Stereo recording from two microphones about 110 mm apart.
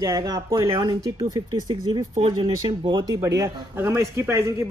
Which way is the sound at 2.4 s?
55° right (ahead or behind).